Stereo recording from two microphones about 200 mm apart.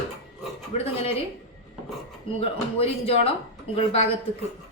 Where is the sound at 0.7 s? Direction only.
30° left (ahead or behind).